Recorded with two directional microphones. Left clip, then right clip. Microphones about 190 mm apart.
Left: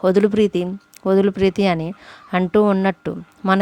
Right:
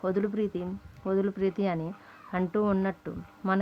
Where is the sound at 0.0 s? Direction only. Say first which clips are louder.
Left 14 dB; 45° left (ahead or behind).